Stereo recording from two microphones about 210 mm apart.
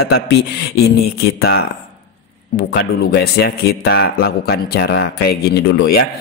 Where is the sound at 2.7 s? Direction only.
50° left (ahead or behind).